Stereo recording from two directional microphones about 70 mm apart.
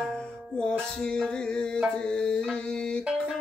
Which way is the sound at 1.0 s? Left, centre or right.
Centre.